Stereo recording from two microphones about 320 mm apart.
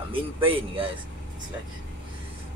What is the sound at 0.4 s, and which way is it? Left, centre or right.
Speech, centre.